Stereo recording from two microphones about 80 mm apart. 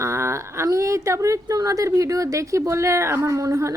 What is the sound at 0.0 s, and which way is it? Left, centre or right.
A woman's voice, right.